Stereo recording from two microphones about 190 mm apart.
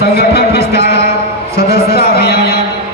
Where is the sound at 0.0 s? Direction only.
60° left (ahead or behind).